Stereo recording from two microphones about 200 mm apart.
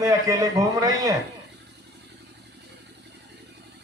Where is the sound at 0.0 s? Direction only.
15° right (ahead or behind).